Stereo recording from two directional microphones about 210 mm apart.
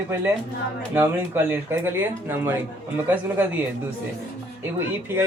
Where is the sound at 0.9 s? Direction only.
10° right (ahead or behind).